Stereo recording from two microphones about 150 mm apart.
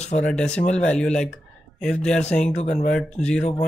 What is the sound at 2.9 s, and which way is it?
Speech, 5° left (ahead or behind).